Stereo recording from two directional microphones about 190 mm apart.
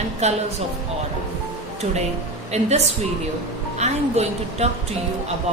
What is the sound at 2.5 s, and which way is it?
Speech, 35° right (ahead or behind).